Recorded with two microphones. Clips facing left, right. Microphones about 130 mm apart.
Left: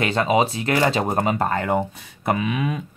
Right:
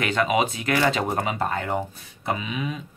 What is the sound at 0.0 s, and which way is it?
Speech, 30° left (ahead or behind).